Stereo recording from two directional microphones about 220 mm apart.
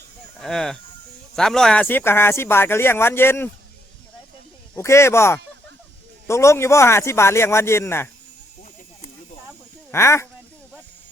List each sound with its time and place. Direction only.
0.3 s speech: centre (ahead or behind)
4.7 s speech: 10° left (ahead or behind)
9.9 s speech: 10° left (ahead or behind)